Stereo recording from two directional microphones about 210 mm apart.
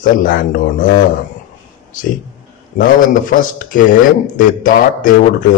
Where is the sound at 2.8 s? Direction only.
40° left (ahead or behind).